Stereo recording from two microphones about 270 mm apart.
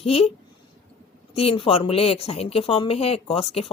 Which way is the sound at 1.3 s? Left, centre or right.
Left.